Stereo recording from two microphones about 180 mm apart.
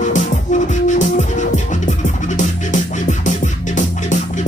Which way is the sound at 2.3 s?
45° left (ahead or behind).